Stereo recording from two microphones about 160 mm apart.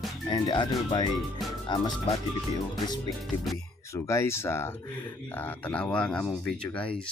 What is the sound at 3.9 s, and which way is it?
Speech, 15° left (ahead or behind).